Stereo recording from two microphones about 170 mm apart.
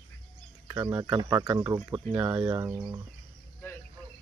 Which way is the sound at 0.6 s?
15° right (ahead or behind).